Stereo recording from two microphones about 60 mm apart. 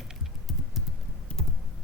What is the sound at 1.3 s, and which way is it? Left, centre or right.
Computer keyboard, centre.